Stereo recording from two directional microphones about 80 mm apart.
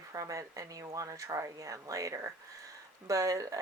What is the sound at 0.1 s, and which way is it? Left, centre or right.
Speech, right.